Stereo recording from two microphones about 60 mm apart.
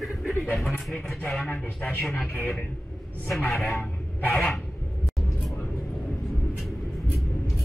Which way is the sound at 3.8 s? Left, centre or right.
Left.